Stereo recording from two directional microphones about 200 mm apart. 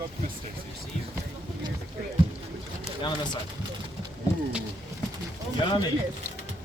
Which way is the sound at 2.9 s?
20° left (ahead or behind).